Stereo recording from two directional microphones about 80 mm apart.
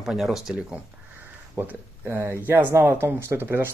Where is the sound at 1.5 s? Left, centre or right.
Right.